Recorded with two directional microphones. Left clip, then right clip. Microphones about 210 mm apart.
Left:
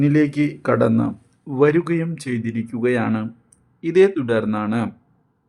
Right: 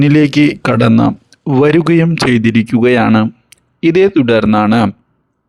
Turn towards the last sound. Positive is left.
turn(degrees=-45)  # may be behind; listen again after turning